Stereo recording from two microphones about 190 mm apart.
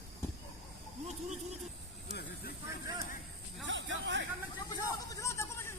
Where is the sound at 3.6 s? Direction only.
75° right (ahead or behind).